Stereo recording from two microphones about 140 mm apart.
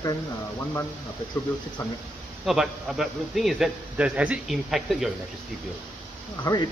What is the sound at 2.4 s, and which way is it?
A man's voice, 5° right (ahead or behind).